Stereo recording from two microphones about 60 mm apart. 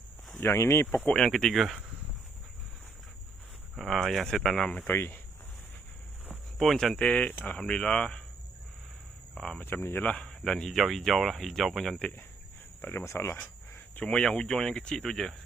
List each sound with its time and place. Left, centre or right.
0.3 s speech: left
0.9 s speech: left
1.1 s speech: centre
3.8 s speech: centre
4.9 s speech: left
6.6 s speech: centre
7.0 s speech: left
9.3 s speech: centre
9.6 s speech: left
10.0 s speech: left
10.2 s speech: centre
12.8 s speech: left
13.1 s speech: left
14.0 s speech: centre